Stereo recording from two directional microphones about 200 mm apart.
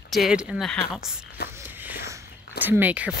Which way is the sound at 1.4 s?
55° left (ahead or behind).